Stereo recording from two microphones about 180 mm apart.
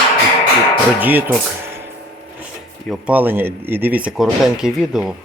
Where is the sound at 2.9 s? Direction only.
10° right (ahead or behind).